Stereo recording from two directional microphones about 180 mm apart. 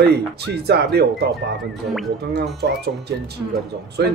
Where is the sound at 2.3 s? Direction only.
65° right (ahead or behind).